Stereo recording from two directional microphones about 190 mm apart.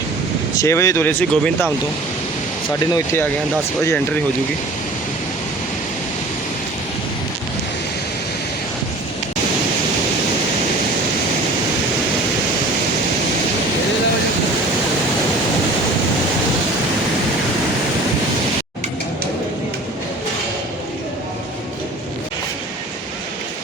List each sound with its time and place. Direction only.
0.6 s speech: 15° left (ahead or behind)
2.9 s speech: 15° left (ahead or behind)